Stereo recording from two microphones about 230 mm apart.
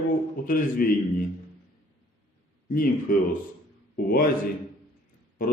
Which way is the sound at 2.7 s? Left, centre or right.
Left.